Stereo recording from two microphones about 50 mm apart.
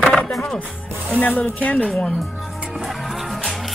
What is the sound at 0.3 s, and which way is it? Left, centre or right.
Music, centre.